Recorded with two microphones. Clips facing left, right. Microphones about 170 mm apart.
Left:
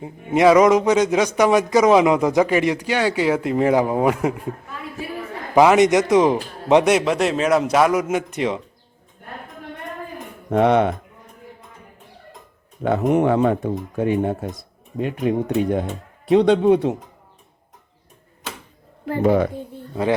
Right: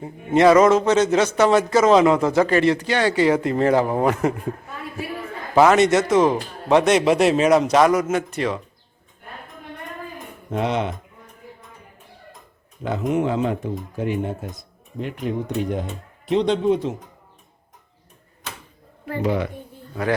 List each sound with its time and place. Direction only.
0.3 s a man's voice: 10° left (ahead or behind)
5.5 s a man's voice: 15° left (ahead or behind)
7.0 s a man's voice: 5° right (ahead or behind); by 8.6 s 20° left (ahead or behind)
10.5 s speech: 60° left (ahead or behind)
12.8 s speech: 60° left (ahead or behind)
19.2 s a woman's voice: 50° left (ahead or behind)
19.9 s speech: 25° left (ahead or behind)